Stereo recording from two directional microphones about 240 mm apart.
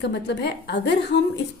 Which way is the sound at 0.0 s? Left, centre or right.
Left.